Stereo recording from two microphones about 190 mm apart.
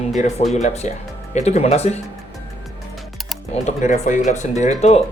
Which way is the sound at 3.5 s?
40° left (ahead or behind).